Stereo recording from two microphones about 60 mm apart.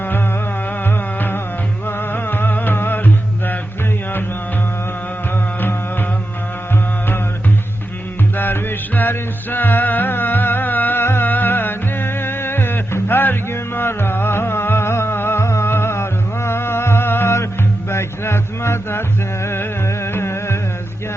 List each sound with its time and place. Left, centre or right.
1.9 s music: left
9.0 s music: left